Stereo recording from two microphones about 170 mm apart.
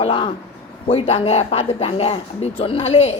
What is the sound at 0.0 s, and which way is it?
Speech, 30° left (ahead or behind).